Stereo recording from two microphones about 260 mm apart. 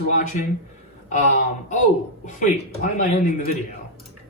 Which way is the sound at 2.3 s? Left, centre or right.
Left.